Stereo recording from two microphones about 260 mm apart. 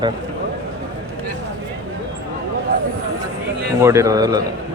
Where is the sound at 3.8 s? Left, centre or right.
Centre.